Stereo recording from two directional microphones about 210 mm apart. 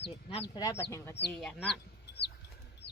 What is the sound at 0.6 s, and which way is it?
Speech, 15° left (ahead or behind).